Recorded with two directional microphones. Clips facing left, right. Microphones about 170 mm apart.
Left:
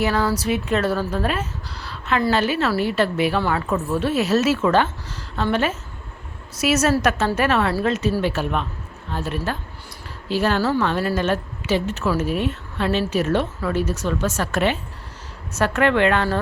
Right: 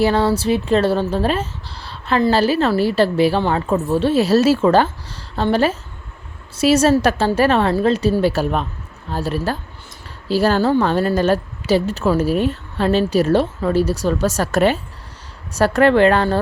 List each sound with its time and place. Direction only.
0.0 s a woman's voice: 30° right (ahead or behind)